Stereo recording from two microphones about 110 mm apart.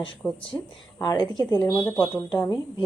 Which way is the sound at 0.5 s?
20° left (ahead or behind).